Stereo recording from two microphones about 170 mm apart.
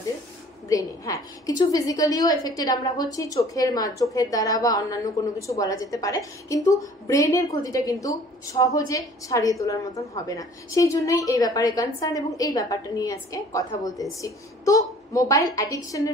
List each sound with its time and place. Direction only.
0.7 s a woman's voice: 20° left (ahead or behind)